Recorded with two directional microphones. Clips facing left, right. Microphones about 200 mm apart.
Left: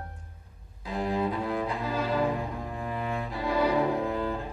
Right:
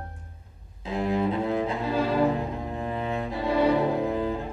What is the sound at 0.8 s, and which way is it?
Cello, 25° right (ahead or behind).